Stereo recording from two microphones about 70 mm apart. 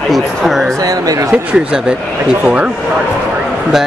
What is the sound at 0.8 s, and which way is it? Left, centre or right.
Speech, right.